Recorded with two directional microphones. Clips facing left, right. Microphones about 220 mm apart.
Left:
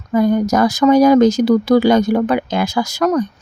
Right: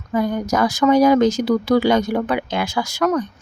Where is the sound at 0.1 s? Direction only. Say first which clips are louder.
Left 6 dB; 45° left (ahead or behind).